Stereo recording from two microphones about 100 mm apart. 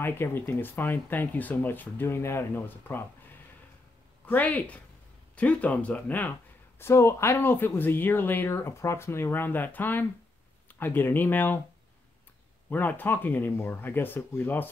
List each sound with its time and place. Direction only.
0.0 s speech: 25° left (ahead or behind)
4.3 s speech: 15° left (ahead or behind)
6.8 s speech: 30° left (ahead or behind)
12.6 s speech: 20° left (ahead or behind)